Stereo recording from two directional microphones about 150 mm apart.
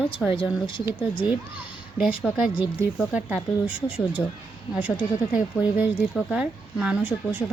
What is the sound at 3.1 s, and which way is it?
Speech, 10° right (ahead or behind).